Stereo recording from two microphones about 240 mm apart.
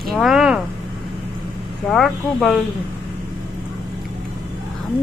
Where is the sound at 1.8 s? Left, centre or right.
Centre.